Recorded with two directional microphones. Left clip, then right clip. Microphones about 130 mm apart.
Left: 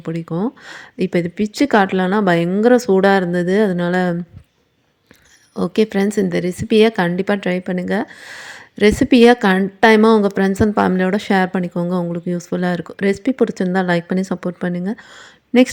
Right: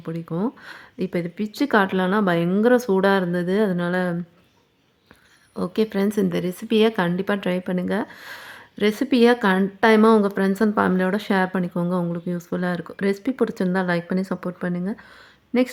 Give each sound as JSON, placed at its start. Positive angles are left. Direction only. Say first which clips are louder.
{"t": 0.0, "sound": "a woman's voice", "louder": "left 5 dB", "side_deg": 25}
{"t": 5.5, "sound": "a woman's voice", "louder": "left 6 dB", "side_deg": 25}